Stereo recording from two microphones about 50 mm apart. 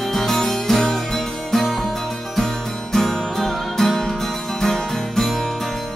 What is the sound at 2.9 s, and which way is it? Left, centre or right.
Music, centre.